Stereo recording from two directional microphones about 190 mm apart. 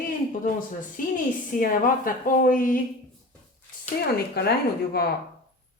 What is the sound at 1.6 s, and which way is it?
Speech, 45° left (ahead or behind).